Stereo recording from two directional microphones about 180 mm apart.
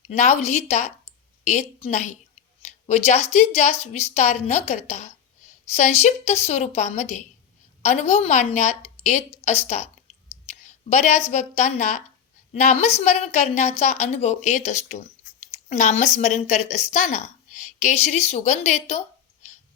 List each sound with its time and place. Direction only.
0.1 s a woman's voice: 35° left (ahead or behind)